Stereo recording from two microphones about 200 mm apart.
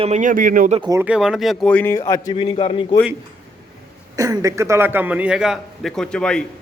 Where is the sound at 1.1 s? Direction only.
5° right (ahead or behind); by 2.9 s 25° left (ahead or behind).